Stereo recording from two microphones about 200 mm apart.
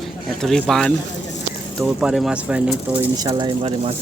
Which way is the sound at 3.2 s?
20° right (ahead or behind).